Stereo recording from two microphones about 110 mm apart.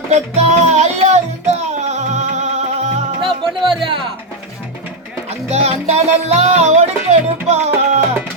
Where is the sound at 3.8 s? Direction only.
50° right (ahead or behind).